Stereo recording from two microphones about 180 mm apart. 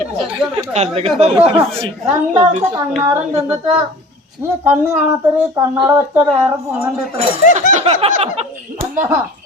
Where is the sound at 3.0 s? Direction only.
15° right (ahead or behind).